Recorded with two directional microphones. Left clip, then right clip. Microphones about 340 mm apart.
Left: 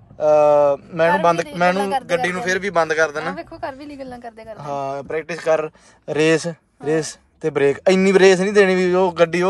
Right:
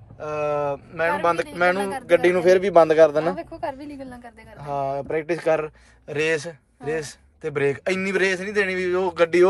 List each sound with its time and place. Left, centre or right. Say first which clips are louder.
0.2 s a man's voice: left 12 dB; centre
3.3 s a sound: left 1 dB; left
4.2 s speech: left 8 dB; centre